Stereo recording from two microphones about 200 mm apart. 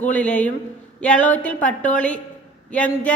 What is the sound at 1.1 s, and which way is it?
Speech, 40° left (ahead or behind).